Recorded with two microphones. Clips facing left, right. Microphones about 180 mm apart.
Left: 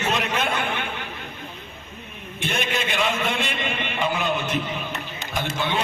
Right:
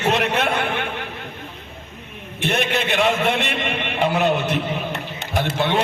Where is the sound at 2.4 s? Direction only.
65° right (ahead or behind).